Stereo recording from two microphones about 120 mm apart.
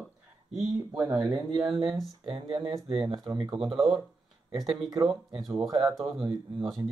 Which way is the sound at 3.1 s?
35° right (ahead or behind).